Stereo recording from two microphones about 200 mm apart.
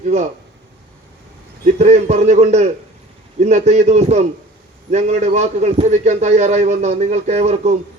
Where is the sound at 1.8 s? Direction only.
35° right (ahead or behind).